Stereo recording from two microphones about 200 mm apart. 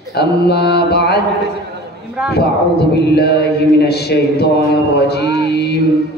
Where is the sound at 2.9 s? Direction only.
55° left (ahead or behind).